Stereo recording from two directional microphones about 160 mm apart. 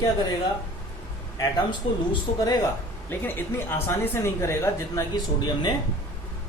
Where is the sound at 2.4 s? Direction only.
25° left (ahead or behind).